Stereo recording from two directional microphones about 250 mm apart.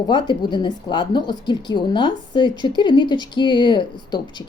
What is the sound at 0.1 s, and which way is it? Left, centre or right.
A woman's voice, centre.